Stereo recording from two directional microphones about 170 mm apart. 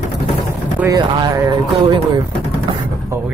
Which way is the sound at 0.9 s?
25° right (ahead or behind).